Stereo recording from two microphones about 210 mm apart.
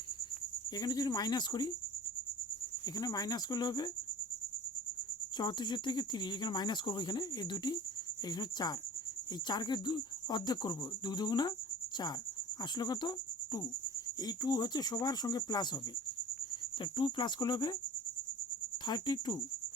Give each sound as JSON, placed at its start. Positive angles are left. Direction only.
{"t": 0.8, "sound": "speech", "side_deg": 20}
{"t": 2.8, "sound": "speech", "side_deg": 20}
{"t": 5.4, "sound": "speech", "side_deg": 20}
{"t": 12.7, "sound": "cricket", "side_deg": 20}
{"t": 14.2, "sound": "speech", "side_deg": 20}
{"t": 18.9, "sound": "speech", "side_deg": 20}